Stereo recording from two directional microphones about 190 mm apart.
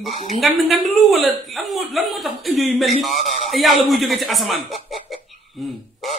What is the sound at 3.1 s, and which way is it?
Speech, 40° left (ahead or behind).